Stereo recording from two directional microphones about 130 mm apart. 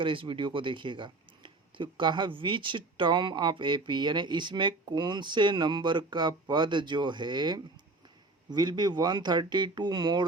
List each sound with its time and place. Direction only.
0.0 s speech: 40° right (ahead or behind)